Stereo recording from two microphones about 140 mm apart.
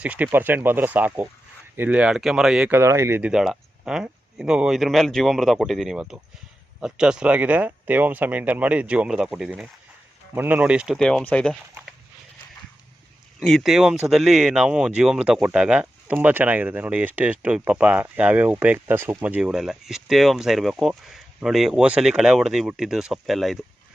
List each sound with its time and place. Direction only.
0.0 s speech: 10° right (ahead or behind)
3.2 s speech: 5° right (ahead or behind)
11.0 s speech: 10° left (ahead or behind)
13.4 s speech: centre (ahead or behind)